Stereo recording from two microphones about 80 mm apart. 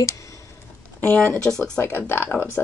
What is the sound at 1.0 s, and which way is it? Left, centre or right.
Speech, left.